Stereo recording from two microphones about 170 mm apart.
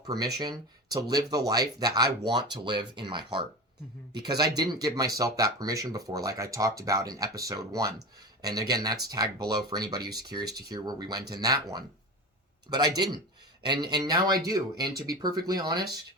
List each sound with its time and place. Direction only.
0.0 s speech: 20° right (ahead or behind)